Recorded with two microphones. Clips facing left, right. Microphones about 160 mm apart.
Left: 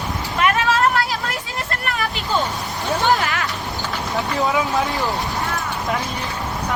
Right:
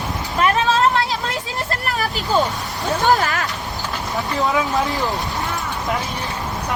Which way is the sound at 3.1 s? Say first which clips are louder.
Right 3 dB; 40° right (ahead or behind).